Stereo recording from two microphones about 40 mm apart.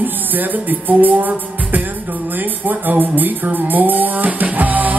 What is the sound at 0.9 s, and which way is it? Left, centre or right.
Music, right.